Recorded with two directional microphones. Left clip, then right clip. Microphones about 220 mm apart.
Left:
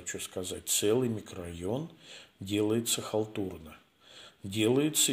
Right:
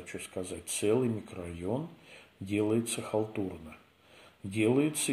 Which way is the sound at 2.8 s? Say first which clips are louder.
Left 1 dB; 15° left (ahead or behind).